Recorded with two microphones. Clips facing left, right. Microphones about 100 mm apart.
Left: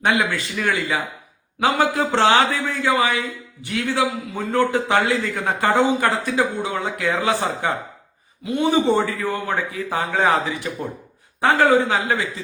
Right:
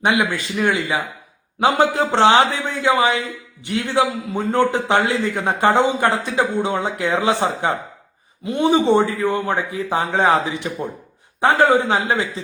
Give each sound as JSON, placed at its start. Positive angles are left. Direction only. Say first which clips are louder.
{"t": 0.0, "sound": "a man's voice", "louder": "right 1 dB", "side_deg": -15}